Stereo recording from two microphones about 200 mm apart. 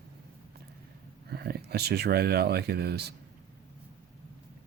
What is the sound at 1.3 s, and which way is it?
Speech, 50° right (ahead or behind).